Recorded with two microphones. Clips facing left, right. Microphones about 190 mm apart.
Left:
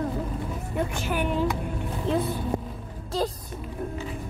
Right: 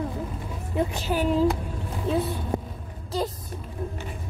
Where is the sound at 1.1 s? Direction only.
40° right (ahead or behind).